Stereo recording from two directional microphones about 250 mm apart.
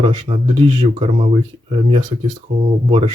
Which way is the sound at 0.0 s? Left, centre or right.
Centre.